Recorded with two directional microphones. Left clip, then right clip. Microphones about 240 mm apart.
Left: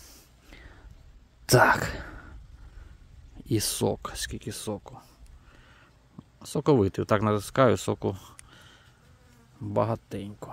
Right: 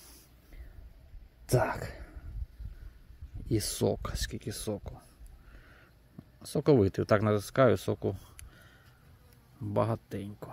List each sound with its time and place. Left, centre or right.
1.4 s whispering: centre
3.4 s speech: centre
6.4 s speech: centre